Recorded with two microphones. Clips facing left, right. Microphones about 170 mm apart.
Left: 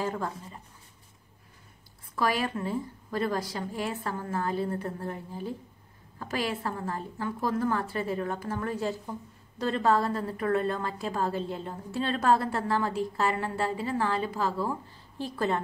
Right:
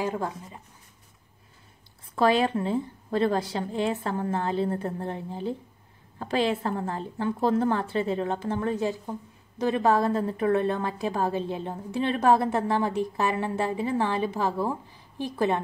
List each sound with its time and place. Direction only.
0.0 s speech: 15° right (ahead or behind)
2.1 s a woman's voice: 25° right (ahead or behind)